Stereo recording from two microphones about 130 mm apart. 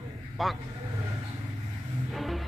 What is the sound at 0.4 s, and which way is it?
Speech, centre (ahead or behind).